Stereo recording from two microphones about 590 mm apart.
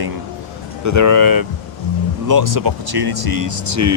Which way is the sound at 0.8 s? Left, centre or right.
Right.